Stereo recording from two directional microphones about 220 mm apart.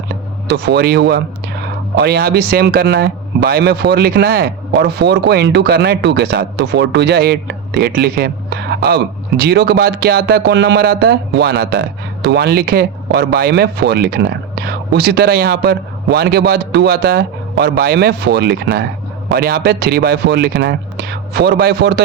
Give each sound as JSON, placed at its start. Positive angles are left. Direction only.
{"t": 0.5, "sound": "speech", "side_deg": -45}